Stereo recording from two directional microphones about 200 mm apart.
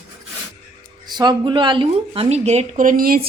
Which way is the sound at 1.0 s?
20° right (ahead or behind).